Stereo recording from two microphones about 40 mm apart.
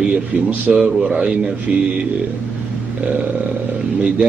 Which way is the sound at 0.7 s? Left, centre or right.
Right.